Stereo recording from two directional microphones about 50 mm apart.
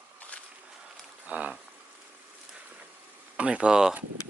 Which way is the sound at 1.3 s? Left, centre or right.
Right.